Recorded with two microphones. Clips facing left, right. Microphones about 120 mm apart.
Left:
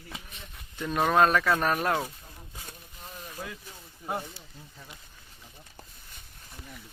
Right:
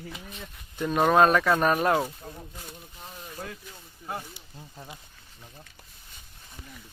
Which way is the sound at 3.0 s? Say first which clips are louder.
Left 1 dB; 40° right (ahead or behind).